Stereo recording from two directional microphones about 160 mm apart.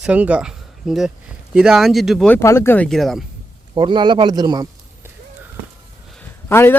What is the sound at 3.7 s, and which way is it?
Speech, 30° right (ahead or behind).